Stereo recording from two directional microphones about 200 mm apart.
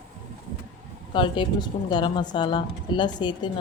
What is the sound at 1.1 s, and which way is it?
A woman's voice, 25° left (ahead or behind).